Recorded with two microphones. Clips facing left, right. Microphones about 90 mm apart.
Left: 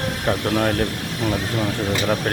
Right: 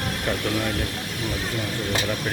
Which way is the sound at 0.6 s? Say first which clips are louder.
Left 7 dB; 60° left (ahead or behind).